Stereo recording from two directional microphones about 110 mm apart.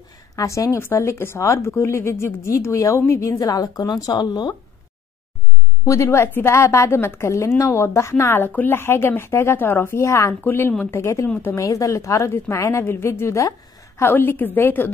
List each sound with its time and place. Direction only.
0.4 s a woman's voice: 30° left (ahead or behind)
5.9 s a woman's voice: 25° left (ahead or behind)